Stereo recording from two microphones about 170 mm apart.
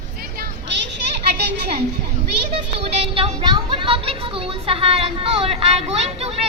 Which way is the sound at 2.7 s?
35° right (ahead or behind).